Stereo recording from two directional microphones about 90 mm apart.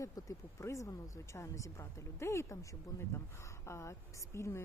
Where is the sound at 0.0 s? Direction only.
35° left (ahead or behind).